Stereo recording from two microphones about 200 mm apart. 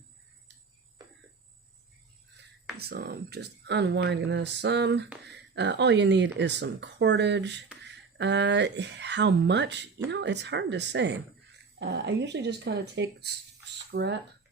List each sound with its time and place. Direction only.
2.7 s speech: 50° right (ahead or behind)